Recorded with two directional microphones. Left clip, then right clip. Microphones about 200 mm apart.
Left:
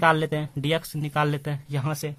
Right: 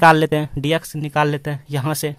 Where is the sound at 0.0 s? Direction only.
30° right (ahead or behind).